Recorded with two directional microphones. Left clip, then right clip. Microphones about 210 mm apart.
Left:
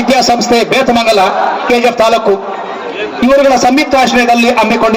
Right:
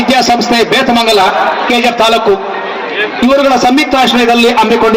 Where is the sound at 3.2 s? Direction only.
30° left (ahead or behind).